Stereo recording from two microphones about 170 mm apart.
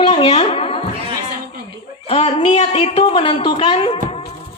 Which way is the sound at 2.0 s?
35° left (ahead or behind).